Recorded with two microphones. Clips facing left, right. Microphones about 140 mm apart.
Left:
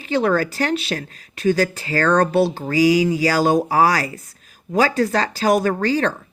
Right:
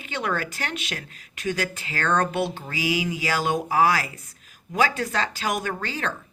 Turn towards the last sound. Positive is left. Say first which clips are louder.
# left 10 dB
turn(degrees=35)  # may be behind; listen again after turning